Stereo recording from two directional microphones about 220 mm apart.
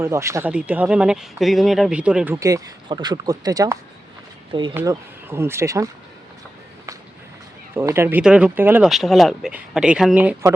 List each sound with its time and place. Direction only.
0.0 s speech: 15° right (ahead or behind)
7.7 s speech: 10° right (ahead or behind)